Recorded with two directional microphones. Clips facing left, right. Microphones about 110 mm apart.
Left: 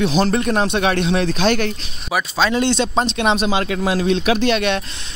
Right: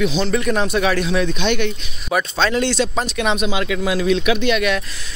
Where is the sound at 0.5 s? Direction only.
30° left (ahead or behind).